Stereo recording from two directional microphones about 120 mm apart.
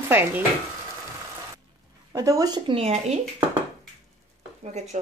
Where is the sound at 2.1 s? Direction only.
30° right (ahead or behind).